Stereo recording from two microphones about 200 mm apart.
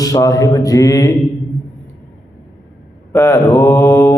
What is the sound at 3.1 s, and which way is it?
Mantra, 15° left (ahead or behind).